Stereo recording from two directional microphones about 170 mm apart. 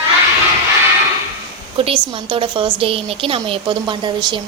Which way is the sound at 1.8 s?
30° right (ahead or behind).